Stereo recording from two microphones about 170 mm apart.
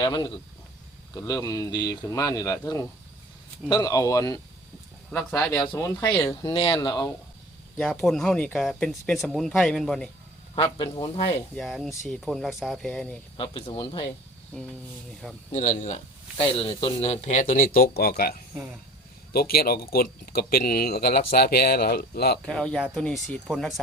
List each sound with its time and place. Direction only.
0.0 s speech: 25° left (ahead or behind)
5.1 s speech: 5° left (ahead or behind)
5.5 s speech: 20° left (ahead or behind)
6.4 s speech: 35° left (ahead or behind)
7.8 s speech: 5° left (ahead or behind)
10.5 s speech: 30° left (ahead or behind)
11.5 s speech: centre (ahead or behind)
13.3 s speech: 30° left (ahead or behind)
15.5 s speech: 45° left (ahead or behind)
16.4 s speech: 35° left (ahead or behind); by 22.4 s 70° left (ahead or behind)
22.4 s speech: 5° left (ahead or behind)